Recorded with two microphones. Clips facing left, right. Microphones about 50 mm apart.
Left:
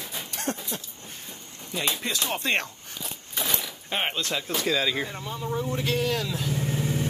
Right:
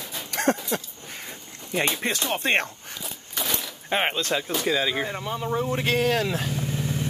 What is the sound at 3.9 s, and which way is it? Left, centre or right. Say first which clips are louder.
Speech: right 4 dB; right.